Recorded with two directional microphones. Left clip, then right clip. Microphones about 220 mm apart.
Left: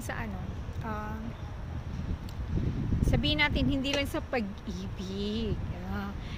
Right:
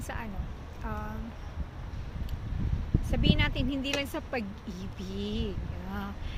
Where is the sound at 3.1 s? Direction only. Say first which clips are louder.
Left 2 dB; 15° left (ahead or behind).